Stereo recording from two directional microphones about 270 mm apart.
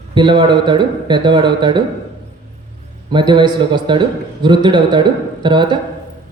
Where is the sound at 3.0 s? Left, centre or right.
Centre.